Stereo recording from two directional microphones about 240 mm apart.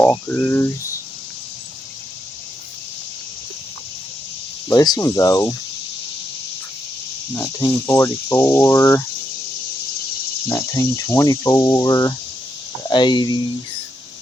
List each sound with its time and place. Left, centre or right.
0.0 s cricket: centre
4.7 s speech: centre
7.3 s speech: centre
10.5 s speech: centre